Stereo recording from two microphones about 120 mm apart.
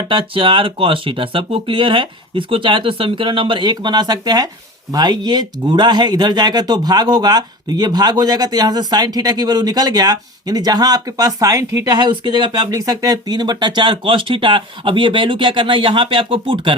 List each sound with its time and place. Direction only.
0.1 s speech: 45° right (ahead or behind); by 11.9 s 30° right (ahead or behind)
11.9 s speech: 40° right (ahead or behind)